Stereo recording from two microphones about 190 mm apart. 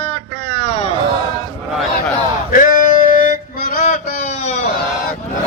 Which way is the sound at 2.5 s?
45° left (ahead or behind).